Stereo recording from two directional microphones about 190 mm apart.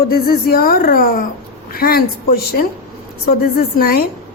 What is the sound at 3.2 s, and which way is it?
Speech, 50° left (ahead or behind).